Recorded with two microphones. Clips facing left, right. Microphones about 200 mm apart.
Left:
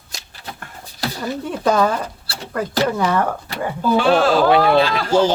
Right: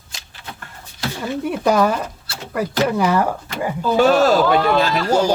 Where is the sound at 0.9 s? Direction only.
35° left (ahead or behind).